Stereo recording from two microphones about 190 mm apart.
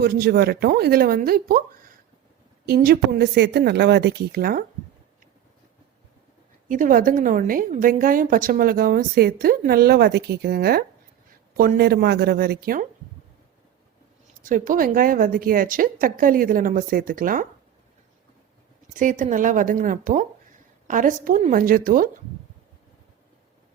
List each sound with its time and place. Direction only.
0.0 s a woman's voice: 55° right (ahead or behind)
2.6 s speech: 55° right (ahead or behind)
6.7 s a woman's voice: 45° right (ahead or behind)
14.4 s a woman's voice: 45° right (ahead or behind)
18.9 s a woman's voice: 40° right (ahead or behind)